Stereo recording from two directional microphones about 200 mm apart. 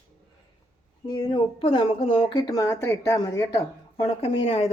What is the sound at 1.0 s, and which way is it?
Speech, 25° left (ahead or behind).